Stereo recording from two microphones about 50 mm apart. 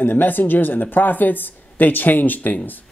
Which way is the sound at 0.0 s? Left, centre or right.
Left.